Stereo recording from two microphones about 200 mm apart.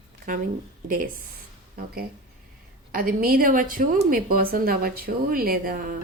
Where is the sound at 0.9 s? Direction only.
45° right (ahead or behind).